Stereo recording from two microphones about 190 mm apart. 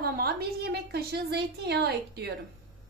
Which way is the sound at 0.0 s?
55° right (ahead or behind).